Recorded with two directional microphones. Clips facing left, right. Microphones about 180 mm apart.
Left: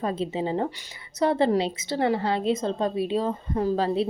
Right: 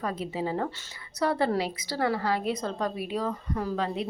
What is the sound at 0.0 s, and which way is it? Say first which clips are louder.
A woman's voice: left 4 dB; 25° left (ahead or behind).